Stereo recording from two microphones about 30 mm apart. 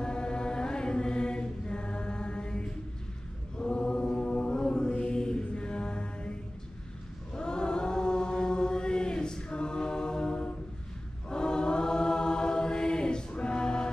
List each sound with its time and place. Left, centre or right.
0.0 s mantra: left
7.3 s chant: left
11.2 s choir: left